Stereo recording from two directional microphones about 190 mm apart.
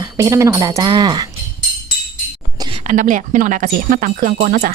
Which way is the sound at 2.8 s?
40° right (ahead or behind).